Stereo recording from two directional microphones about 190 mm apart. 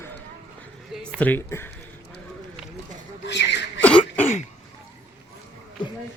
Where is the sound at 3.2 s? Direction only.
65° left (ahead or behind).